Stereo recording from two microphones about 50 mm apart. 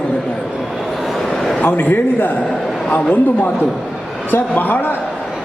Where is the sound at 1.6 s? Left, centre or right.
Left.